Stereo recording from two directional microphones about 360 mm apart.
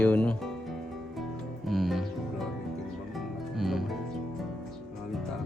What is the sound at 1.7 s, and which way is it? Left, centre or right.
Music, centre.